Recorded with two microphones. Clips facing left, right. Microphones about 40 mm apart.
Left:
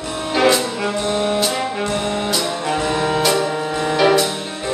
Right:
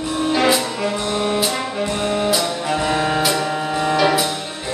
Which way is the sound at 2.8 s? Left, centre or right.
Centre.